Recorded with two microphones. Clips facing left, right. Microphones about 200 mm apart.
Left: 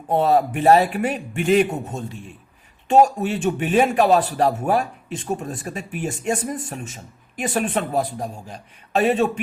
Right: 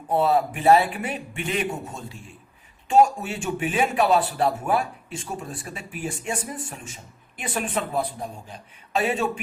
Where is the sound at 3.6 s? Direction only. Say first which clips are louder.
Left 4 dB; 40° left (ahead or behind).